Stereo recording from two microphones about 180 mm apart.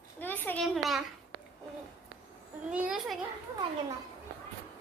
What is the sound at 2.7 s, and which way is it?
Speech, 5° right (ahead or behind).